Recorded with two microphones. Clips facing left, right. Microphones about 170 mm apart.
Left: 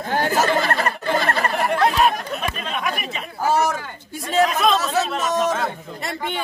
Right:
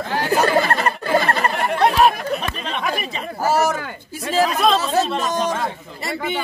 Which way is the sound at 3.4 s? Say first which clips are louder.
Right 1 dB; 5° right (ahead or behind).